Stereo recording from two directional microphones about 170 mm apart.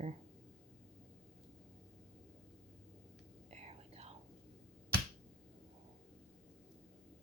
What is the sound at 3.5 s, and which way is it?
Whispering, 40° right (ahead or behind).